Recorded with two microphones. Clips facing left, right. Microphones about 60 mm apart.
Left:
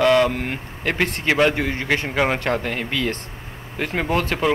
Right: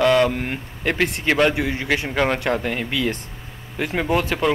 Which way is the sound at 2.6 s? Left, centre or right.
Centre.